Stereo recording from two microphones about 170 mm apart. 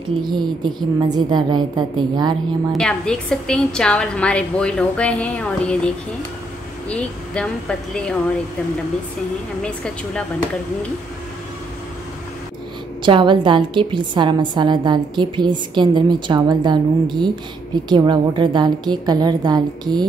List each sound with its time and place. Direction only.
0.2 s a woman's voice: 25° right (ahead or behind)
2.7 s a woman's voice: 5° left (ahead or behind)
6.9 s a woman's voice: 5° left (ahead or behind)
9.6 s a woman's voice: 5° left (ahead or behind)
13.0 s a woman's voice: 30° right (ahead or behind)